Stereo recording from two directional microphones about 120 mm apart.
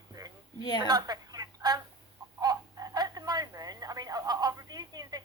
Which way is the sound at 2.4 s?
30° right (ahead or behind).